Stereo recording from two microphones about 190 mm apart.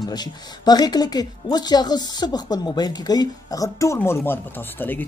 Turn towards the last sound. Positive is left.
turn(degrees=10)  # may be behind; listen again after turning